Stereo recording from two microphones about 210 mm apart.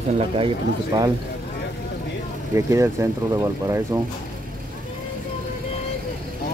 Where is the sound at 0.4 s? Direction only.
20° right (ahead or behind).